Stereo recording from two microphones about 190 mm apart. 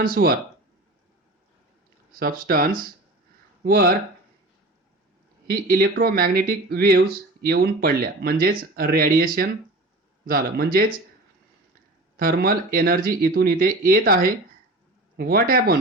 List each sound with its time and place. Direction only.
0.0 s speech: 50° right (ahead or behind)
2.1 s speech: 50° right (ahead or behind)
5.5 s speech: 50° right (ahead or behind)
12.1 s speech: 50° right (ahead or behind)